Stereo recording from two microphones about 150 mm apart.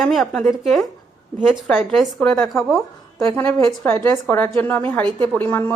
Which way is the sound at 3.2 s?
15° left (ahead or behind).